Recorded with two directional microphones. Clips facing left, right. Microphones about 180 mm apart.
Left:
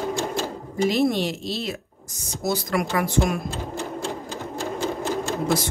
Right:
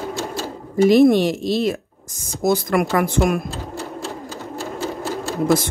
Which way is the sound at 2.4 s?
55° right (ahead or behind).